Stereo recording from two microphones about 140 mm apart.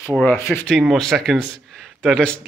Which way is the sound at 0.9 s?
Centre (ahead or behind).